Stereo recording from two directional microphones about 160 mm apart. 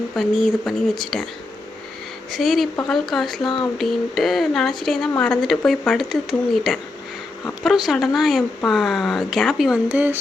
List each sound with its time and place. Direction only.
0.2 s speech: centre (ahead or behind)
2.3 s speech: centre (ahead or behind)
3.4 s a sound: 30° left (ahead or behind)
3.8 s speech: centre (ahead or behind)